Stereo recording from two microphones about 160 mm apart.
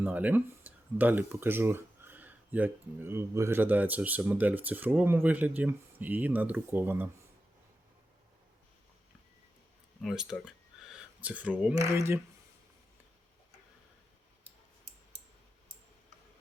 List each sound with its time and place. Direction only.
0.0 s speech: 10° right (ahead or behind)
10.0 s a sound: centre (ahead or behind)
11.8 s speech: 20° right (ahead or behind)